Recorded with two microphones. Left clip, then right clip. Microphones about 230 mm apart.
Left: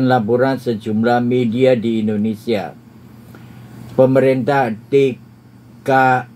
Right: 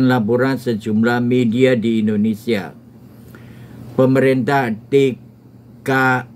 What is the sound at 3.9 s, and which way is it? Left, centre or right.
Speech, right.